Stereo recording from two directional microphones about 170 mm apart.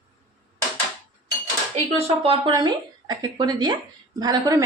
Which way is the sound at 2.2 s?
30° right (ahead or behind).